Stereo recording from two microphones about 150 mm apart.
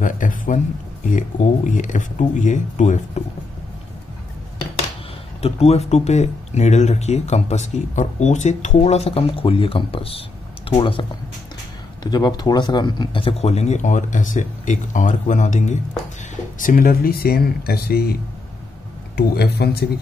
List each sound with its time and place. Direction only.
0.0 s a sound: 60° left (ahead or behind)
1.1 s speech: 55° left (ahead or behind)
5.4 s speech: 45° left (ahead or behind)
16.5 s speech: 65° left (ahead or behind); by 18.1 s 90° left
19.1 s speech: 90° left